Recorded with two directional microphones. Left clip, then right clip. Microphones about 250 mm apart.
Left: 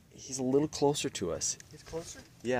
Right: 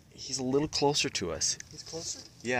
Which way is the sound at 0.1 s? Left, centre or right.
Centre.